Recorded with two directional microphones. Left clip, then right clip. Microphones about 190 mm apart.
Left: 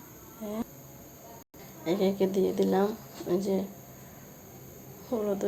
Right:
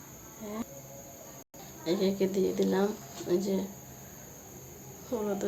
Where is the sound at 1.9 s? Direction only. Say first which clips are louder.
Left 2 dB; 15° left (ahead or behind).